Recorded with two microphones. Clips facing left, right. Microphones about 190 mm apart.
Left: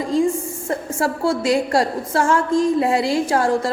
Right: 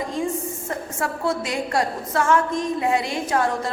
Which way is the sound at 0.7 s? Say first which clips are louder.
Left 7 dB; 30° left (ahead or behind).